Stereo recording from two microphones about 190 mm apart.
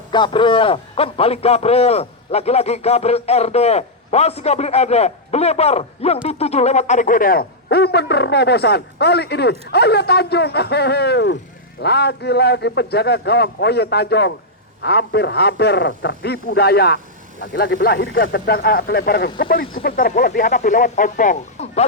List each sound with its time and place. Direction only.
0.1 s a man's voice: 25° left (ahead or behind)